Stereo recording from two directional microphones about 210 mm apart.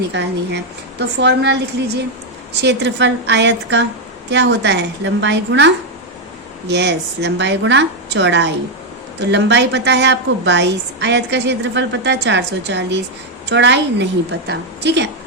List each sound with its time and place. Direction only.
0.1 s a woman's voice: 55° right (ahead or behind)